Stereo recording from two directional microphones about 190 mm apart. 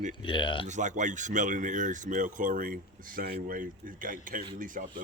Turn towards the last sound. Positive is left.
turn(degrees=-45)  # may be behind; listen again after turning